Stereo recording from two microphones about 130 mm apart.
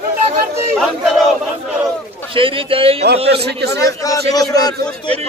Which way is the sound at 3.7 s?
25° left (ahead or behind).